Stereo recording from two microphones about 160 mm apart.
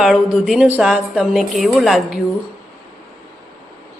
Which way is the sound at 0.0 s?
5° right (ahead or behind).